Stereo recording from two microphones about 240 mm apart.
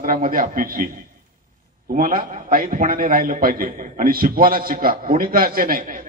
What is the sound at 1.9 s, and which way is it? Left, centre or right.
A man's voice, right.